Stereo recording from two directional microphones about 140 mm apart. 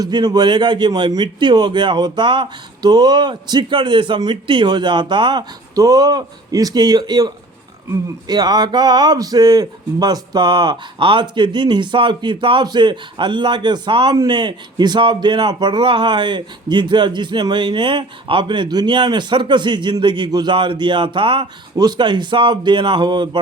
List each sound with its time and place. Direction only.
0.0 s speech: 30° right (ahead or behind)